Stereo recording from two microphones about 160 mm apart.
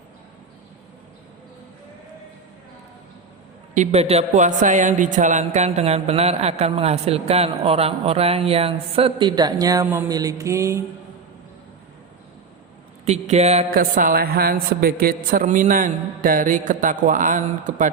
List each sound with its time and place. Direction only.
3.8 s speech: 40° right (ahead or behind); by 9.8 s 25° right (ahead or behind)
9.8 s a sound: 10° right (ahead or behind)
10.1 s music: 20° right (ahead or behind)
13.1 s speech: 40° right (ahead or behind)
13.7 s a man's voice: 60° right (ahead or behind)